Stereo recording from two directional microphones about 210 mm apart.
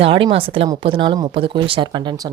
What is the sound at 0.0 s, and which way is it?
A woman's voice, 25° right (ahead or behind).